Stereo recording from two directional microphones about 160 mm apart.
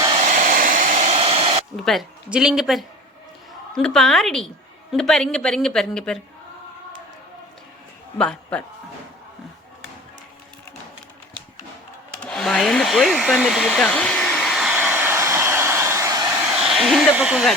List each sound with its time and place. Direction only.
0.3 s hair dryer: 55° right (ahead or behind); by 1.6 s 35° right (ahead or behind)
1.7 s a woman's voice: centre (ahead or behind)
8.2 s a man's voice: 5° left (ahead or behind)
12.2 s a woman's voice: 5° left (ahead or behind)
13.7 s hair dryer: 5° left (ahead or behind); by 16.0 s 15° right (ahead or behind)
16.6 s speech: centre (ahead or behind)